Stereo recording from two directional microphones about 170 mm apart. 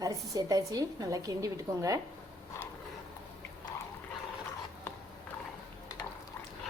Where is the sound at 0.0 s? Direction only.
20° right (ahead or behind).